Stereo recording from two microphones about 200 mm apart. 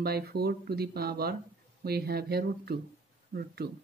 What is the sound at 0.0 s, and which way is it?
Speech, 50° right (ahead or behind).